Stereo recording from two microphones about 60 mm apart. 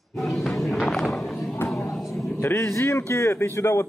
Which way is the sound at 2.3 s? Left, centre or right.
Left.